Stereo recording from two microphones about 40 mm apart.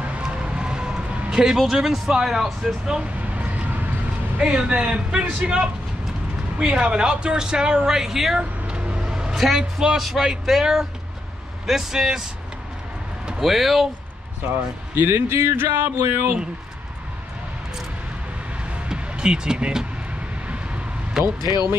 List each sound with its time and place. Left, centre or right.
0.2 s a sound: right
1.6 s speech: centre
3.3 s vehicle: right
4.4 s speech: right
6.7 s speech: right; by 8.4 s centre
8.4 s vehicle: right
9.3 s speech: centre
13.4 s speech: centre
15.0 s a sound: right
18.9 s vehicle: right
21.2 s speech: centre